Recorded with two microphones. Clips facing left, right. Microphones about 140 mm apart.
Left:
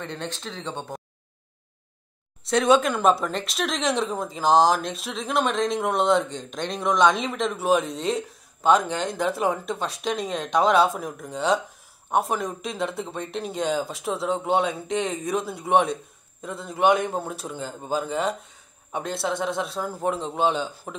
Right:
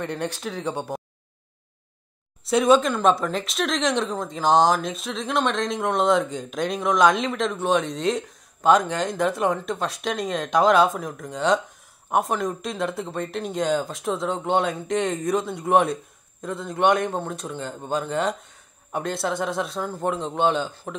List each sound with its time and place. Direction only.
0.0 s speech: 10° right (ahead or behind)
2.4 s speech: centre (ahead or behind)